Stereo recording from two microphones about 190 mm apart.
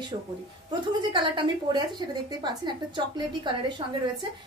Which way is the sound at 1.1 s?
25° right (ahead or behind).